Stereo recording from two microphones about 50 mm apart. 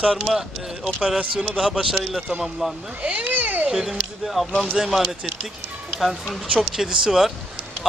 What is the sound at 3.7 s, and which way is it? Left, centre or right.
Speech, centre.